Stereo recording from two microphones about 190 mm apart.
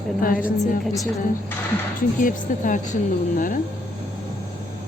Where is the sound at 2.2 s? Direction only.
45° left (ahead or behind).